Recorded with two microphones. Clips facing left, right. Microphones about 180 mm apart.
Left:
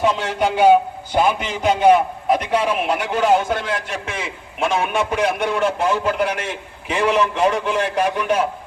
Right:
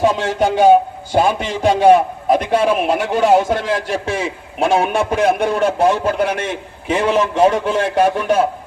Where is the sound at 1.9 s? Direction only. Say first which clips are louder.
Right 3 dB; 40° right (ahead or behind).